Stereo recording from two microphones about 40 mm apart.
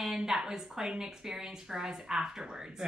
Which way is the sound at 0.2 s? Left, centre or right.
Centre.